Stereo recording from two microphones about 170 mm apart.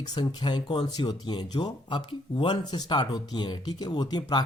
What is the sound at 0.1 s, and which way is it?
Speech, 25° left (ahead or behind).